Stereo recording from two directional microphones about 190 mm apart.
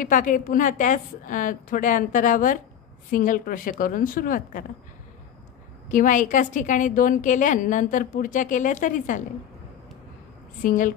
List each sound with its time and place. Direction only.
0.0 s a woman's voice: 45° left (ahead or behind)
5.9 s a woman's voice: 45° left (ahead or behind)
10.6 s a woman's voice: 45° left (ahead or behind)